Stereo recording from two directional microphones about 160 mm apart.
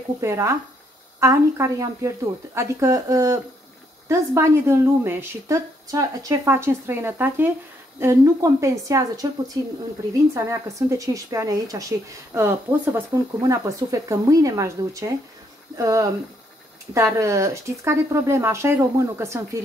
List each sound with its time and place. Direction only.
0.2 s a woman's voice: 20° right (ahead or behind)